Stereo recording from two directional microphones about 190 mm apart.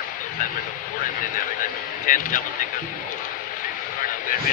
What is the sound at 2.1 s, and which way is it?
Speech, 45° left (ahead or behind).